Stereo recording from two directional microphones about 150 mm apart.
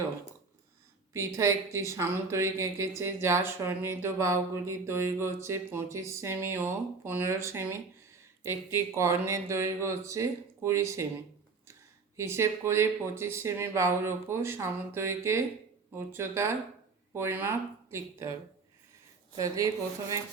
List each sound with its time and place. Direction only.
1.1 s a woman's voice: 20° right (ahead or behind)
19.4 s speech: 20° right (ahead or behind)